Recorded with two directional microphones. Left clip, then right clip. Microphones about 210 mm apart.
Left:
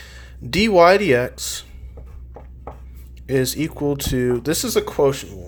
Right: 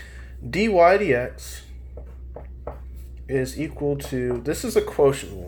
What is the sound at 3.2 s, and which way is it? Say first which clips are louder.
Speech: left 5 dB; 30° left (ahead or behind).